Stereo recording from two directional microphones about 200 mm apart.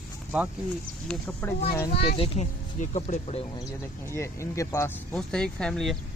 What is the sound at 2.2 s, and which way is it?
Speech, 35° left (ahead or behind).